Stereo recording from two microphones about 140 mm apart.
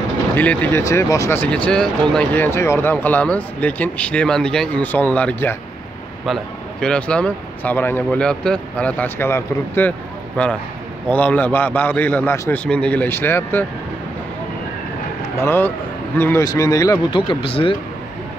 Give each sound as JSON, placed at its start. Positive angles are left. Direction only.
{"t": 0.4, "sound": "speech", "side_deg": 10}
{"t": 6.2, "sound": "speech", "side_deg": 5}
{"t": 15.3, "sound": "speech", "side_deg": 15}